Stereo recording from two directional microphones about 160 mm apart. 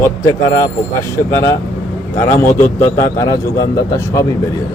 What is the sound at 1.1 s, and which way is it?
Speech, 15° left (ahead or behind).